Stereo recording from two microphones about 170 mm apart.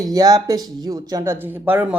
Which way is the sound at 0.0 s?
20° right (ahead or behind).